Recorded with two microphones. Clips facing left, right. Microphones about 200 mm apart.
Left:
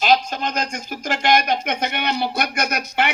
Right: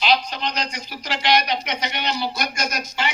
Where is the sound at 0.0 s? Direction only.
45° left (ahead or behind).